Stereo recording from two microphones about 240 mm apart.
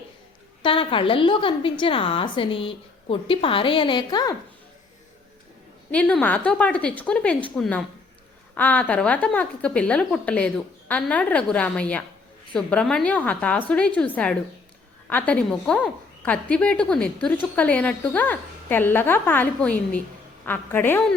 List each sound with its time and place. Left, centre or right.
0.6 s a woman's voice: left
5.9 s a woman's voice: centre